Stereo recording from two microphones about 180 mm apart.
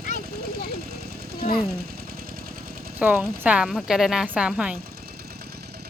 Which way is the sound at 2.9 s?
10° right (ahead or behind).